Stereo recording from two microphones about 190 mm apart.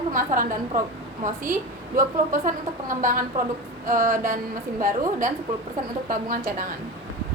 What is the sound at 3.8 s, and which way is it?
Speech, 45° right (ahead or behind).